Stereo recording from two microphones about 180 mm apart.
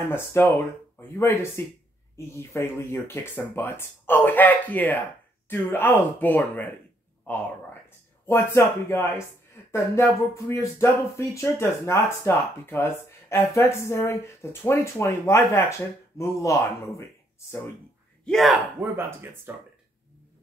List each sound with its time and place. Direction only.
0.0 s speech: 15° left (ahead or behind)
18.2 s speech: centre (ahead or behind)
18.8 s speech: 10° right (ahead or behind)